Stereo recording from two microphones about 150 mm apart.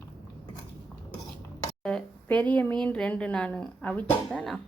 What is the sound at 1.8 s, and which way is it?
A woman's voice, 5° left (ahead or behind).